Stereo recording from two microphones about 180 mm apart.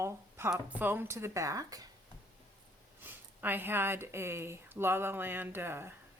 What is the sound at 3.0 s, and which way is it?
Speech, 10° right (ahead or behind).